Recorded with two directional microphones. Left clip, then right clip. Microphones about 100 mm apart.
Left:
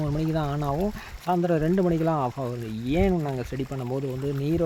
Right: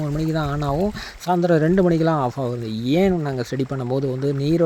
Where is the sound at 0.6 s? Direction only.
55° right (ahead or behind).